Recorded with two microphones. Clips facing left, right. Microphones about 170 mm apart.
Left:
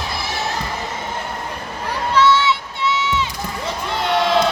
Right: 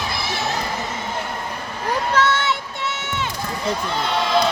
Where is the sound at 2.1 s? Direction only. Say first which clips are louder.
Left 7 dB; 50° right (ahead or behind).